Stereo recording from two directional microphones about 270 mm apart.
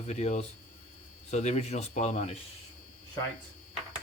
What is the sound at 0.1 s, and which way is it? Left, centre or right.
Speech, left.